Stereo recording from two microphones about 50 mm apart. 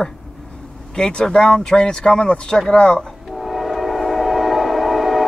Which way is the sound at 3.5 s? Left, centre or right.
Centre.